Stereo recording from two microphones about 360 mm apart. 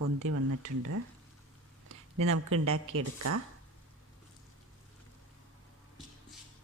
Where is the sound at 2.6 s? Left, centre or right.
Right.